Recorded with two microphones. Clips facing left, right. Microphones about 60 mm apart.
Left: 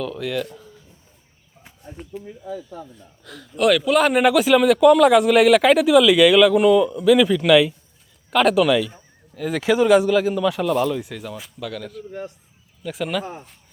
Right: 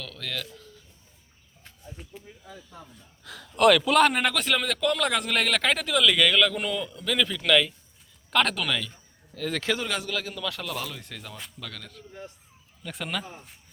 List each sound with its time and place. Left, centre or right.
0.0 s a man's voice: centre
2.8 s a man's voice: centre